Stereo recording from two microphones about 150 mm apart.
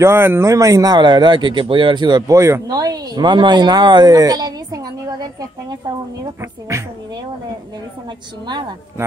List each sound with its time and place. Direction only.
0.0 s speech: 15° right (ahead or behind)
8.5 s speech: 30° right (ahead or behind)